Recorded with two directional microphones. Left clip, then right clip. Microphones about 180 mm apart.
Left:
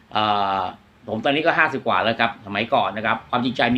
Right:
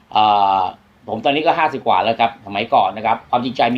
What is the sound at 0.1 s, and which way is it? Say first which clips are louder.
Speech: right 7 dB; 15° left (ahead or behind).